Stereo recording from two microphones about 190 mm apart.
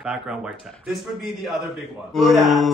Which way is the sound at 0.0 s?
5° right (ahead or behind).